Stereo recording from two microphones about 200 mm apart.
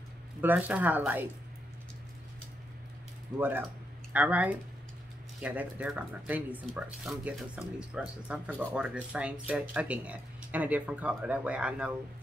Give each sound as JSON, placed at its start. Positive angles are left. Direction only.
{"t": 0.4, "sound": "speech", "side_deg": -10}
{"t": 3.3, "sound": "speech", "side_deg": -10}
{"t": 3.6, "sound": "a sound", "side_deg": -5}
{"t": 5.4, "sound": "speech", "side_deg": -5}